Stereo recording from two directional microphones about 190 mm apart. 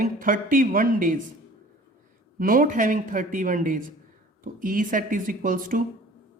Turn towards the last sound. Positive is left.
turn(degrees=-45)  # may be behind; listen again after turning